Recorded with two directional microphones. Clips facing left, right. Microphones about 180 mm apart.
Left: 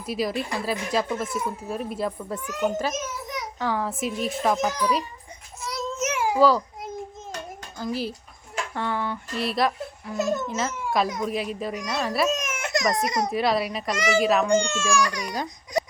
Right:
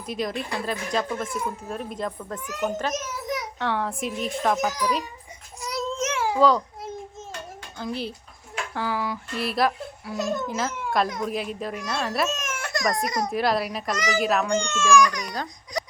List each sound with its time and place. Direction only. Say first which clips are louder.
0.0 s a child's voice: left 2 dB; 5° left (ahead or behind)
5.6 s babbling: right 1 dB; 5° left (ahead or behind)
7.8 s a child's voice: left 2 dB; 5° left (ahead or behind)
12.3 s baby cry: left 4 dB; 15° left (ahead or behind)
13.1 s a child's voice: left 1 dB; 25° left (ahead or behind)
13.3 s a child's voice: left 1 dB; centre (ahead or behind)
14.6 s speech: right 4 dB; 35° left (ahead or behind)